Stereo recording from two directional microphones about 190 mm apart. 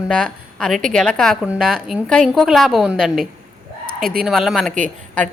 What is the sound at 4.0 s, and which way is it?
Speech, 50° right (ahead or behind).